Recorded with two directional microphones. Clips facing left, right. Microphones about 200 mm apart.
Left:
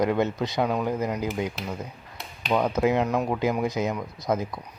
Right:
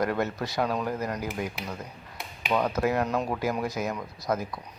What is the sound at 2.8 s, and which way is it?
Speech, 20° left (ahead or behind).